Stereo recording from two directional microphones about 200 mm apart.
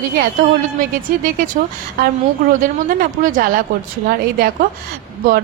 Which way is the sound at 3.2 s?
40° right (ahead or behind).